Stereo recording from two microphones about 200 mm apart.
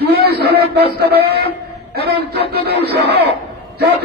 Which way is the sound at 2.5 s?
50° right (ahead or behind).